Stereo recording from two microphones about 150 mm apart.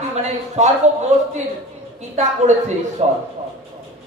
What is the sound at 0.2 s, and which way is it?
Speech, 50° right (ahead or behind).